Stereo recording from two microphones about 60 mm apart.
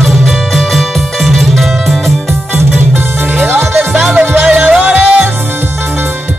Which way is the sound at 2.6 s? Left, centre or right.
Right.